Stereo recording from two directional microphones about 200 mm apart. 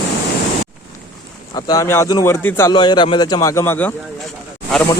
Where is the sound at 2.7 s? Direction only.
25° left (ahead or behind).